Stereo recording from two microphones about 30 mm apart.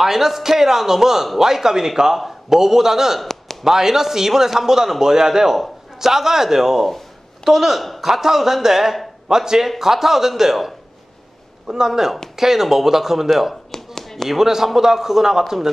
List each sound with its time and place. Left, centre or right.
0.0 s a man's voice: centre
3.2 s a sound: centre
3.6 s a man's voice: centre
11.6 s a man's voice: right